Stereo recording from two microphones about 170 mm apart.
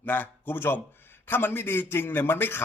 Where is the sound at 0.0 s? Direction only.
10° left (ahead or behind).